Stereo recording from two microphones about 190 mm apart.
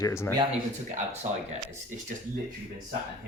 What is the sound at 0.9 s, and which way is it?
Speech, 40° right (ahead or behind).